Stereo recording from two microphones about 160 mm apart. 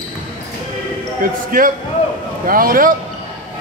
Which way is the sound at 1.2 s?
60° right (ahead or behind).